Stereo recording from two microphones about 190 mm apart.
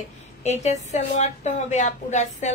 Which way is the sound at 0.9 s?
35° left (ahead or behind).